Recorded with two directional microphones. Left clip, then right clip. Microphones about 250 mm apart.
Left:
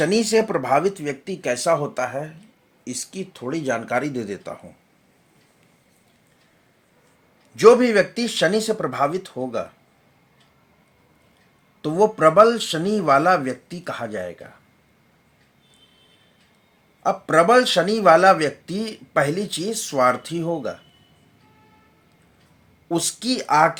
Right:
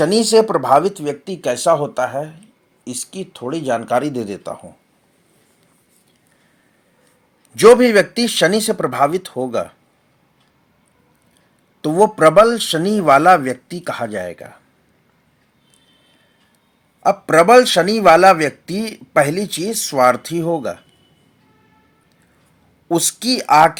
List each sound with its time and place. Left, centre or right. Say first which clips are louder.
0.0 s a man's voice: right 6 dB; right
7.5 s speech: right 5 dB; right
11.8 s a man's voice: right 5 dB; right
17.0 s a man's voice: right 5 dB; right
22.9 s a man's voice: right 6 dB; right